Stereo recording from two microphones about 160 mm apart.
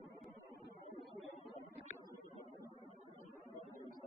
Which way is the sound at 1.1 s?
Centre (ahead or behind).